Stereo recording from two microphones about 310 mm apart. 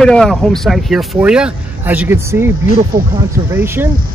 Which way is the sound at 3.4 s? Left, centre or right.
Centre.